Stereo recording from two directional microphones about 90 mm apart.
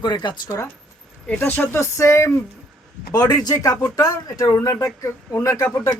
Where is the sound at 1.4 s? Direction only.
25° left (ahead or behind).